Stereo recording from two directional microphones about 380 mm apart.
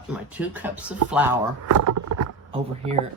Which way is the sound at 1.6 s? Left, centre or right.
Right.